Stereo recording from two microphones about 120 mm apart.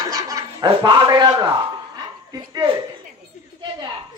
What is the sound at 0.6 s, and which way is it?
Speech, 40° right (ahead or behind).